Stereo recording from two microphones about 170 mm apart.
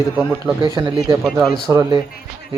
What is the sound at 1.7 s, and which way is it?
Speech, 15° right (ahead or behind).